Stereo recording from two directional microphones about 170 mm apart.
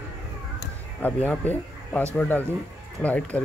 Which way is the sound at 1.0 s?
10° left (ahead or behind).